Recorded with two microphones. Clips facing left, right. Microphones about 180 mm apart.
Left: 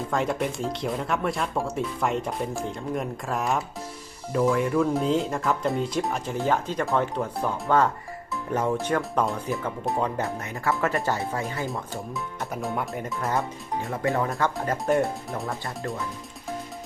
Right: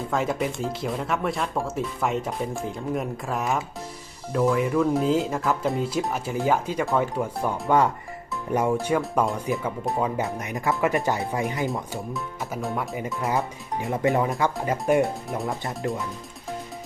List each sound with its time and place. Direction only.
0.1 s speech: centre (ahead or behind)
10.3 s speech: 15° right (ahead or behind)
11.7 s speech: centre (ahead or behind)
13.9 s speech: 20° right (ahead or behind); by 15.4 s centre (ahead or behind)
15.4 s speech: 20° right (ahead or behind)